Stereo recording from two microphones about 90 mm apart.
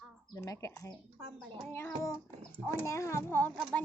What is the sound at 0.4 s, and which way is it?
A child's voice, 35° left (ahead or behind).